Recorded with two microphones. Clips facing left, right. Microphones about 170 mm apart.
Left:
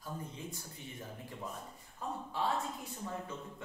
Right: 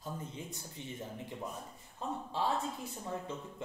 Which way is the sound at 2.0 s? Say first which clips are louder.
Right 2 dB; 25° right (ahead or behind).